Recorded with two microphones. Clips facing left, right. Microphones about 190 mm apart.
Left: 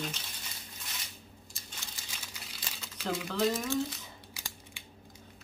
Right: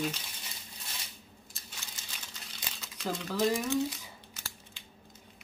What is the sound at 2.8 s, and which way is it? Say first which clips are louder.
Speech: left 1 dB; centre (ahead or behind).